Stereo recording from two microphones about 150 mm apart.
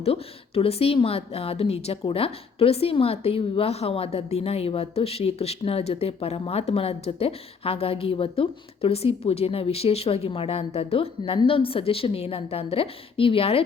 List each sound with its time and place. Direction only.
0.0 s speech: 40° left (ahead or behind)